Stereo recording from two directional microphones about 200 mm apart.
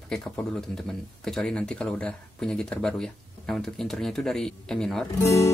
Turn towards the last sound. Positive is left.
turn(degrees=15)  # may be behind; listen again after turning